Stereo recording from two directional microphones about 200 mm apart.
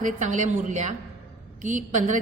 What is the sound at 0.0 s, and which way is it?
A woman's voice, 40° right (ahead or behind).